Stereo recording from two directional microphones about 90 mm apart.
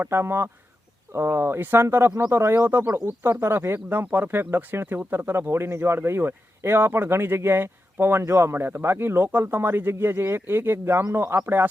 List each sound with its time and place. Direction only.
0.0 s speech: 25° right (ahead or behind)